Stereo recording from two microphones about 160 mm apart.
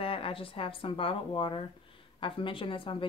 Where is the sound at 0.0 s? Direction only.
35° left (ahead or behind).